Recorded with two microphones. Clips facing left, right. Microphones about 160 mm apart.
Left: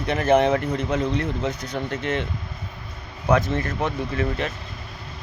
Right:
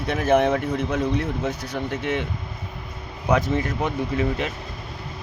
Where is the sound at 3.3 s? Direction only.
15° right (ahead or behind).